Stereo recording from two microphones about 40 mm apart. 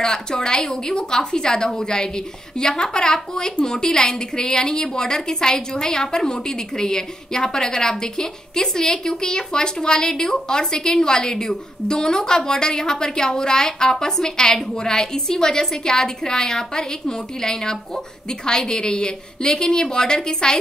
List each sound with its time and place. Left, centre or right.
0.0 s a woman's voice: centre